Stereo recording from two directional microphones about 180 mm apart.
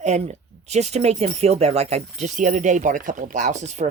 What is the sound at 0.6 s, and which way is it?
Speech, 40° right (ahead or behind).